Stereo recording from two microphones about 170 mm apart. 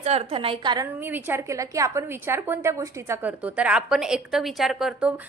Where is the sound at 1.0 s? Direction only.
10° right (ahead or behind).